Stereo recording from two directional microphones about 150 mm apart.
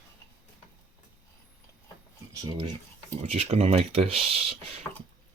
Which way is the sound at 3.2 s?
45° right (ahead or behind).